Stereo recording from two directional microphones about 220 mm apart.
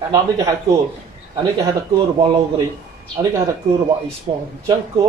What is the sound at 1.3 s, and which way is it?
Speech, 15° right (ahead or behind).